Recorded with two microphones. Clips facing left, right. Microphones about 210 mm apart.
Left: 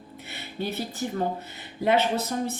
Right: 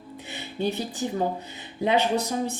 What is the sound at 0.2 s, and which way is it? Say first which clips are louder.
Speech: right 4 dB; 15° right (ahead or behind).